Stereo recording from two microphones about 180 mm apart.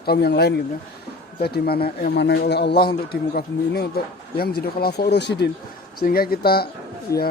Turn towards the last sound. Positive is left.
turn(degrees=15)  # may be behind; listen again after turning